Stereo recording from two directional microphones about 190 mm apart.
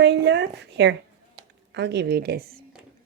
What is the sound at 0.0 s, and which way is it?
A woman's voice, 65° right (ahead or behind).